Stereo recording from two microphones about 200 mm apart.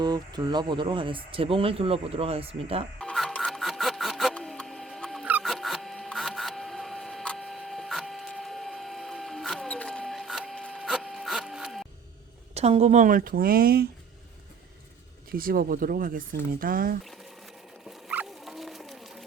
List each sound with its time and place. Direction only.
0.0 s speech: 20° right (ahead or behind)
3.0 s music: centre (ahead or behind)
5.2 s printer: 5° right (ahead or behind)
12.5 s speech: 30° right (ahead or behind); by 13.8 s 50° right (ahead or behind)
15.3 s speech: 45° right (ahead or behind)
17.0 s patter: centre (ahead or behind)